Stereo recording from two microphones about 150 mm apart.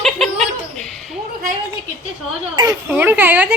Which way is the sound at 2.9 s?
10° right (ahead or behind).